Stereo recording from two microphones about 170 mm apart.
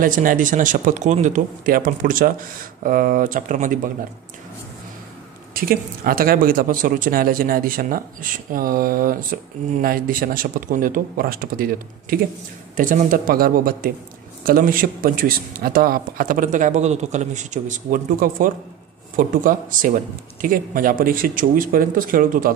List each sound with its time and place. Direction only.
0.0 s speech: 55° right (ahead or behind)
5.5 s speech: 60° right (ahead or behind)